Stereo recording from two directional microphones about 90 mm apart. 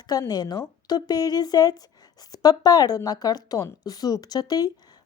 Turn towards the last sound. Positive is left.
turn(degrees=45)  # may be behind; listen again after turning